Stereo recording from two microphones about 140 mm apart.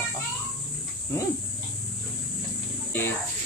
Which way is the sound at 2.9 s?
15° left (ahead or behind).